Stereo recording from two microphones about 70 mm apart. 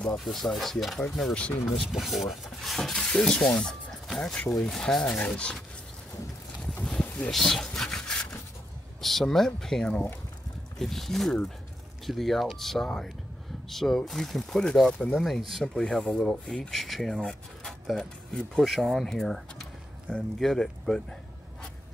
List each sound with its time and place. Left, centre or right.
0.0 s speech: centre
5.0 s speech: left
6.6 s a sound: centre
7.0 s boat: left
7.2 s rub: centre
9.0 s speech: centre
17.2 s a sound: centre
17.8 s speech: centre